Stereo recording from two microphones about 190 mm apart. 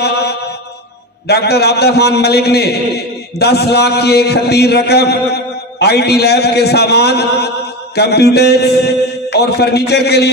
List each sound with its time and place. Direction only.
0.0 s mantra: 60° left (ahead or behind)
1.2 s a man's voice: 60° left (ahead or behind)